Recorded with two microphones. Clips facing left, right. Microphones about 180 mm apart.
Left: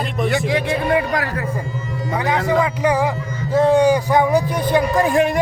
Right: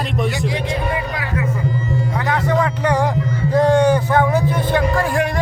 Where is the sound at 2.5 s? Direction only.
10° left (ahead or behind).